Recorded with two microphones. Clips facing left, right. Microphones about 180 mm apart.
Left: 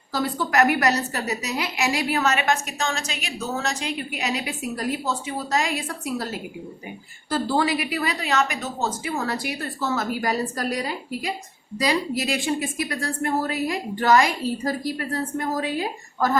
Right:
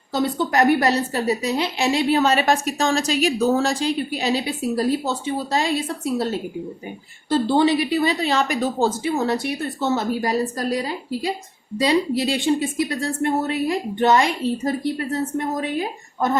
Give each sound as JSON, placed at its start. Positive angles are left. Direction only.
{"t": 0.1, "sound": "a woman's voice", "side_deg": -25}